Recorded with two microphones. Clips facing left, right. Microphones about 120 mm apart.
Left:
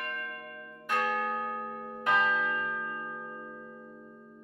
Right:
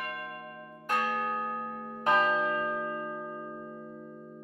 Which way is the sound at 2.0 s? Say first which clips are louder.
Right 2 dB; 30° right (ahead or behind).